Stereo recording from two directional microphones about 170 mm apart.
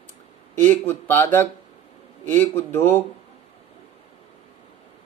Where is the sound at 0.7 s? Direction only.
10° left (ahead or behind).